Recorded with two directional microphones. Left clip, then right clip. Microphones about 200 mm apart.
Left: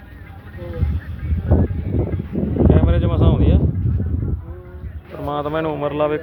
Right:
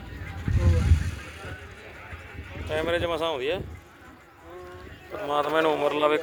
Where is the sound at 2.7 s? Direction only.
5° right (ahead or behind).